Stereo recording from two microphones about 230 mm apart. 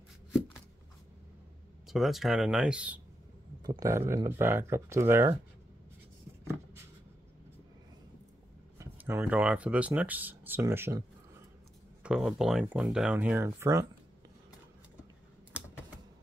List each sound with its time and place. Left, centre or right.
1.9 s speech: centre
8.7 s speech: centre